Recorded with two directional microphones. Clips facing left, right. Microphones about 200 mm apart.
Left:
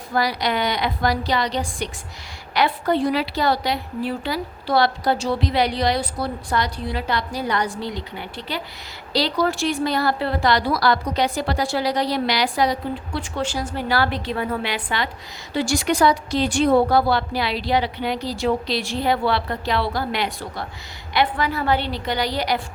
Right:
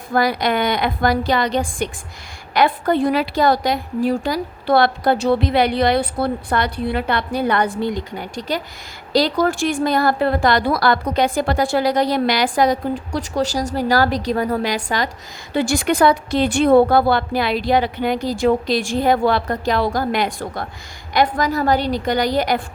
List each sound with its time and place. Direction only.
0.1 s a woman's voice: 50° right (ahead or behind)
15.5 s a woman's voice: 55° right (ahead or behind)